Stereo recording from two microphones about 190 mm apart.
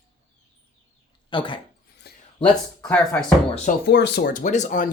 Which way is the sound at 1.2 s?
25° left (ahead or behind).